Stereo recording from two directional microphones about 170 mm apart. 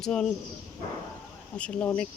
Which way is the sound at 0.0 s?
5° left (ahead or behind).